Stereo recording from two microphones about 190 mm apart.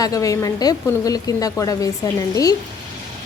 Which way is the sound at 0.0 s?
20° left (ahead or behind).